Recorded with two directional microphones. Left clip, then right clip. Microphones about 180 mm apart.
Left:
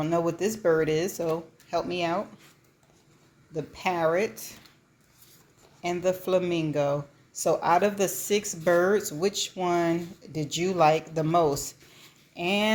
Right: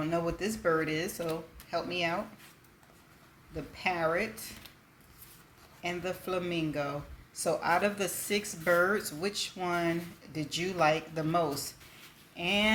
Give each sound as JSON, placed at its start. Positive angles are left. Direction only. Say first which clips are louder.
{"t": 0.0, "sound": "a woman's voice", "louder": "left 6 dB", "side_deg": 40}
{"t": 3.5, "sound": "a woman's voice", "louder": "left 4 dB", "side_deg": 40}
{"t": 5.8, "sound": "a woman's voice", "louder": "left 8 dB", "side_deg": 40}